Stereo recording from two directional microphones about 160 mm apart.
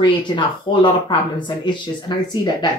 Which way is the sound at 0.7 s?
30° left (ahead or behind).